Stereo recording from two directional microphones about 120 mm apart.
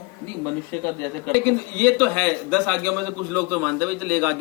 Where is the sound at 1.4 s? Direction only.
10° left (ahead or behind).